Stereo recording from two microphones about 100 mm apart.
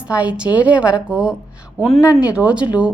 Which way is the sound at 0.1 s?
10° right (ahead or behind).